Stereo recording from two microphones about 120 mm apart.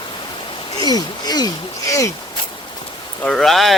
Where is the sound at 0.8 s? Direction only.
35° left (ahead or behind).